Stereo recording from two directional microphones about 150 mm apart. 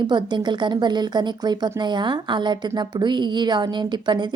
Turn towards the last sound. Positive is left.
turn(degrees=-30)  # may be behind; listen again after turning